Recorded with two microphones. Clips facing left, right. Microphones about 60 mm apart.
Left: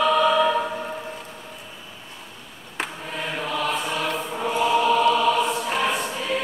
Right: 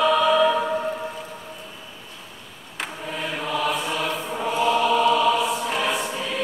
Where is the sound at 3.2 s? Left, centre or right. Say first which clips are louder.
Even; centre.